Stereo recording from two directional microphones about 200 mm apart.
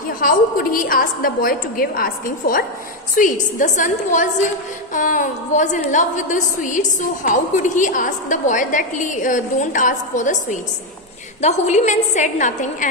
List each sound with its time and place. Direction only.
0.0 s a woman's voice: 45° left (ahead or behind)